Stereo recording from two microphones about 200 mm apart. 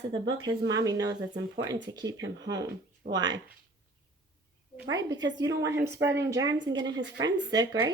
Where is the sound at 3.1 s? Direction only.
20° right (ahead or behind).